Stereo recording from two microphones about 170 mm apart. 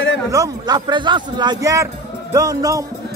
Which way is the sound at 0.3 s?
20° right (ahead or behind).